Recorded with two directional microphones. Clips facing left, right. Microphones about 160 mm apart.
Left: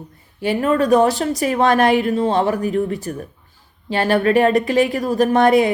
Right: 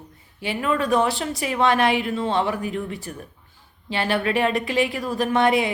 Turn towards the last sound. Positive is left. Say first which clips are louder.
# left 6 dB
turn(degrees=45)  # may be behind; listen again after turning